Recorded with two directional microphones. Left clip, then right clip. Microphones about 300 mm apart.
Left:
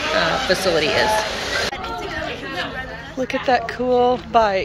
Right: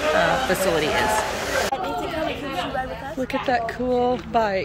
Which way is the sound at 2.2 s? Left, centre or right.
Right.